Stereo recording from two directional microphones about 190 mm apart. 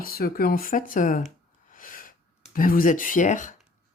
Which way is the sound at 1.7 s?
45° left (ahead or behind).